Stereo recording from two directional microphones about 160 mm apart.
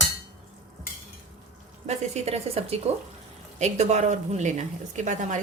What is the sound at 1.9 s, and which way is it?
A woman's voice, 45° right (ahead or behind).